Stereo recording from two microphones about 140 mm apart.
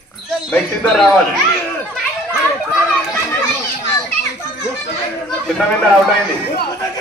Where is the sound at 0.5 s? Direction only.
5° left (ahead or behind).